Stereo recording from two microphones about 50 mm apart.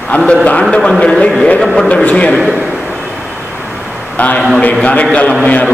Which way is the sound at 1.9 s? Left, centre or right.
Left.